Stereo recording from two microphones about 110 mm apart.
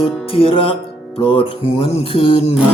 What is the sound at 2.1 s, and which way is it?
Music, 55° left (ahead or behind).